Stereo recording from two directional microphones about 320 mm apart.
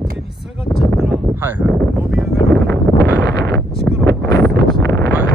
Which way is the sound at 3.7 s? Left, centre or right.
Centre.